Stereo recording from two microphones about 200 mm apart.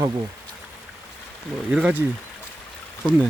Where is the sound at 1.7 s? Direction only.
5° right (ahead or behind).